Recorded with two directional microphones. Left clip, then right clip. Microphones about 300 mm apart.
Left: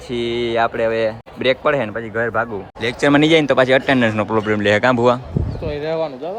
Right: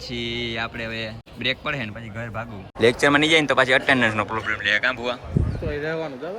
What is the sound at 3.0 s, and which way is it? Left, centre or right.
A man's voice, centre.